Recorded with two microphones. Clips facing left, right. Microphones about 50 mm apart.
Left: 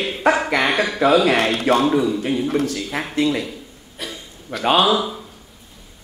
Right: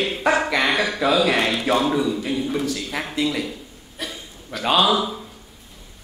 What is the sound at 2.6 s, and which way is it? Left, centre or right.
Speech, left.